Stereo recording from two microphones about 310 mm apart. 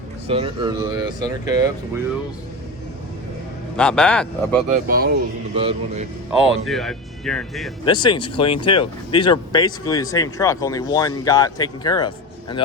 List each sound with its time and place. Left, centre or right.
0.3 s speech: centre
3.8 s speech: centre
4.9 s speech: right
6.7 s speech: centre
7.9 s speech: centre